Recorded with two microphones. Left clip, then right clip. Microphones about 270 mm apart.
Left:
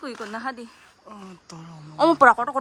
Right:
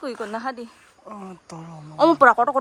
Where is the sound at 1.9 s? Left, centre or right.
Centre.